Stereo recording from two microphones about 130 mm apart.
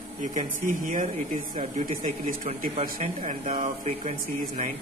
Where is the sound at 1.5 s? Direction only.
75° right (ahead or behind).